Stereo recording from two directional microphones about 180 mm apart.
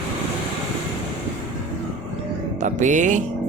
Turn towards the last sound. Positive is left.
turn(degrees=-45)  # may be behind; listen again after turning